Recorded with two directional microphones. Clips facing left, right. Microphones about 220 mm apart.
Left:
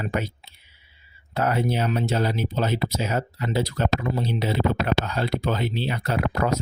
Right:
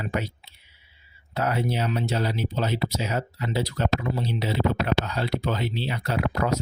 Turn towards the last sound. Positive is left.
turn(degrees=50)  # may be behind; listen again after turning